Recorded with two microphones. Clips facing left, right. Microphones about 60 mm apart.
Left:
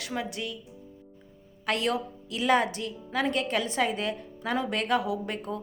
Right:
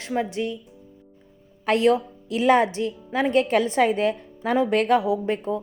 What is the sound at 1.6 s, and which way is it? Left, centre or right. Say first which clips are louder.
A woman's voice: right 9 dB; right.